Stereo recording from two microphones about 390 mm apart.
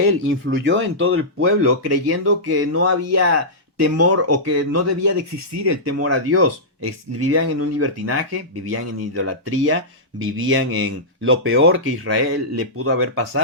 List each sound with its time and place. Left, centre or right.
0.5 s speech: right